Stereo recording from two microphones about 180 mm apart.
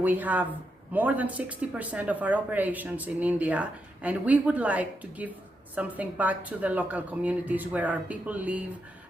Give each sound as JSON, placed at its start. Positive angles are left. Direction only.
{"t": 0.0, "sound": "speech", "side_deg": -10}